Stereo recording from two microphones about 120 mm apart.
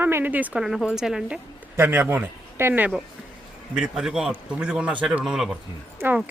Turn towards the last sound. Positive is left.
turn(degrees=-15)  # may be behind; listen again after turning